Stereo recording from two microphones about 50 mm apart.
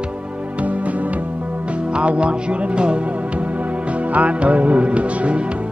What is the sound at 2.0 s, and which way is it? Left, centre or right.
Music, right.